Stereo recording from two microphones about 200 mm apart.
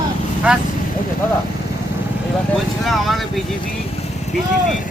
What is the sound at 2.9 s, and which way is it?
Speech, centre (ahead or behind).